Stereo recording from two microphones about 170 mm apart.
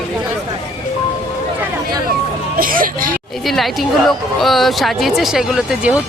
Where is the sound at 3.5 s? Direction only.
Centre (ahead or behind).